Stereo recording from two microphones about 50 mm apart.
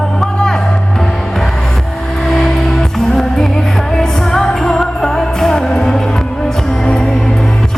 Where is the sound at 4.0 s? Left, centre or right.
Centre.